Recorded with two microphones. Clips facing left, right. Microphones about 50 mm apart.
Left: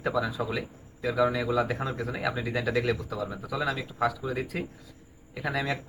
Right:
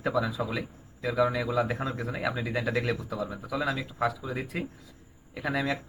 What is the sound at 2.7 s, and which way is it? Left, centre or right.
Speech, right.